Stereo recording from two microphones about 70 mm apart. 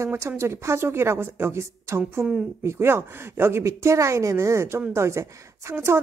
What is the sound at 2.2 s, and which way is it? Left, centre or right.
Speech, centre.